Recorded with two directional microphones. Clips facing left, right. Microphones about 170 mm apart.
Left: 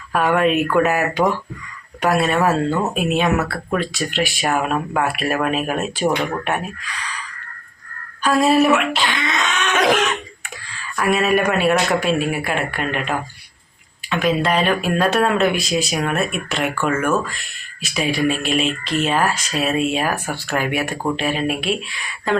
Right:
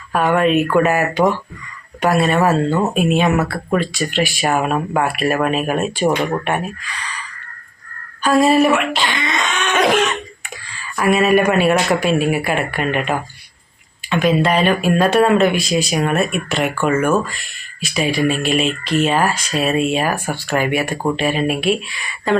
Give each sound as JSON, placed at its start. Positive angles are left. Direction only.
{"t": 0.1, "sound": "speech", "side_deg": 0}
{"t": 14.1, "sound": "speech", "side_deg": 0}